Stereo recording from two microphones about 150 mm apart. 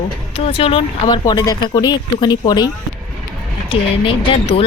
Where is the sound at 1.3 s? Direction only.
30° left (ahead or behind).